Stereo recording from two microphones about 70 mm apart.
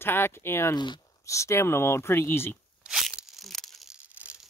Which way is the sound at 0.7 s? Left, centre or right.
Left.